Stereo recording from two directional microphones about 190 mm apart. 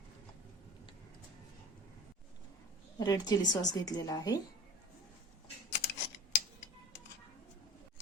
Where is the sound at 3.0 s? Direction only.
20° left (ahead or behind).